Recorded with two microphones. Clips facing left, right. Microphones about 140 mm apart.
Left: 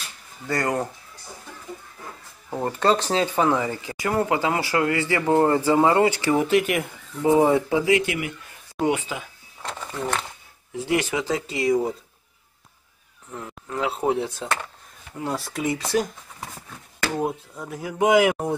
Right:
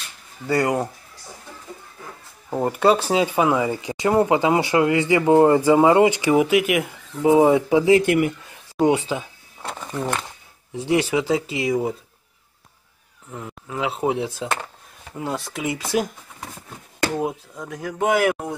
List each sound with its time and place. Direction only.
0.5 s speech: 10° right (ahead or behind)
2.5 s speech: 15° right (ahead or behind)
8.0 s speech: 50° right (ahead or behind)
8.8 s speech: 25° right (ahead or behind)
9.6 s a sound: 10° right (ahead or behind)
10.9 s speech: 20° right (ahead or behind)
11.6 s speech: centre (ahead or behind)
13.3 s speech: 10° right (ahead or behind)
17.2 s speech: 5° left (ahead or behind)